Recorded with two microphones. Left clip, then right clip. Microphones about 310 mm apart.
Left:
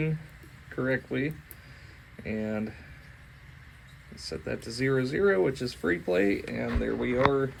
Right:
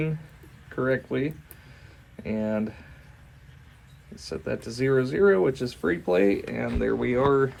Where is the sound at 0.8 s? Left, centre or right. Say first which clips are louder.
Right 4 dB; right.